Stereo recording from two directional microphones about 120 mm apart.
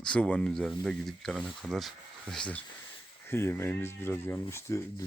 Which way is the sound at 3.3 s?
20° left (ahead or behind).